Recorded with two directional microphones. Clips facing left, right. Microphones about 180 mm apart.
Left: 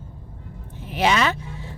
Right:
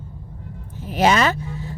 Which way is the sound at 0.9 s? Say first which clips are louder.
Right 3 dB; 40° right (ahead or behind).